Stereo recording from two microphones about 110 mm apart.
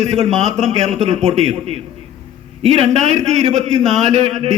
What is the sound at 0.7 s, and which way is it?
A man's voice, 90° right.